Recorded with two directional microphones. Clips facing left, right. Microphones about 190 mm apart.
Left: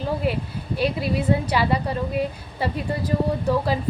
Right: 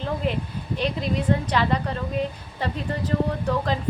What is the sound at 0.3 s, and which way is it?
A woman's voice, 5° left (ahead or behind).